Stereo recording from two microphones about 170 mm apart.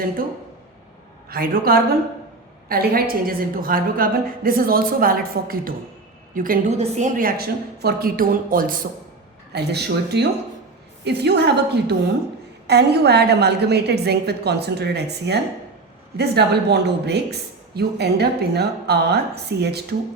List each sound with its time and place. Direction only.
1.3 s a woman's voice: 60° right (ahead or behind)
6.7 s a woman's voice: 40° right (ahead or behind)
7.2 s a woman's voice: 60° right (ahead or behind)
9.5 s a woman's voice: 75° right (ahead or behind)